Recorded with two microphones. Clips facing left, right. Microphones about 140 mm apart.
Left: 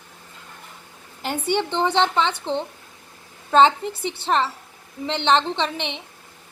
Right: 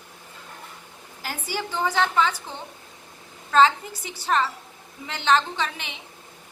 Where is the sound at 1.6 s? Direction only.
25° left (ahead or behind).